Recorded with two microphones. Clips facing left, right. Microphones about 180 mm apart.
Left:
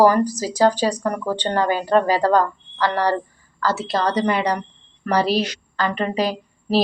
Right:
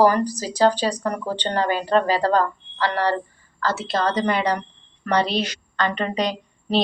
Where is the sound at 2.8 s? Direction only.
35° left (ahead or behind).